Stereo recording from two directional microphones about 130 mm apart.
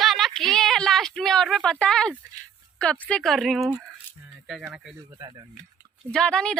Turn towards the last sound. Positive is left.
turn(degrees=5)  # may be behind; listen again after turning